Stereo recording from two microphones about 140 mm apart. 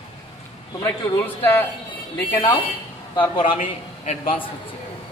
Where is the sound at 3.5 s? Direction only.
55° left (ahead or behind).